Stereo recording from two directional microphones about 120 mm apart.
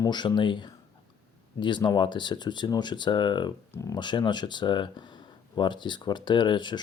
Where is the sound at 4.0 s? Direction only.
40° left (ahead or behind).